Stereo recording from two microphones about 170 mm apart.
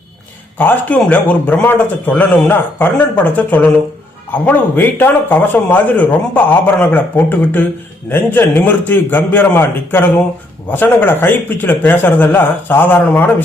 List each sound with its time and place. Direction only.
0.6 s a man's voice: 10° left (ahead or behind)